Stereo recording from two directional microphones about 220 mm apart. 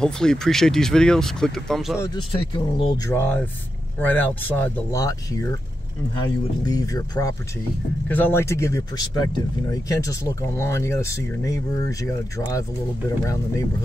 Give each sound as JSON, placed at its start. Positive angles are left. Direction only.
{"t": 0.0, "sound": "speech", "side_deg": 5}
{"t": 2.0, "sound": "speech", "side_deg": 20}
{"t": 3.1, "sound": "speech", "side_deg": 10}